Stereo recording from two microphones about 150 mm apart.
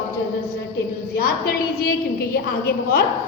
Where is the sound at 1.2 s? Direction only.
90° left.